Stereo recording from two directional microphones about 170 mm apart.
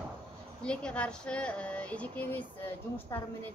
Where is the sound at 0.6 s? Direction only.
5° left (ahead or behind).